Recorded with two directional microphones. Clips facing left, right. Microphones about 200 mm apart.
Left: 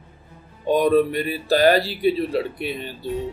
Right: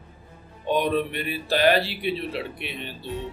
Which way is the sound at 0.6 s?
40° left (ahead or behind).